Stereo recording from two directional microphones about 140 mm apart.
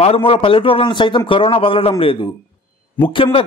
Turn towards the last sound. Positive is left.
turn(degrees=40)  # may be behind; listen again after turning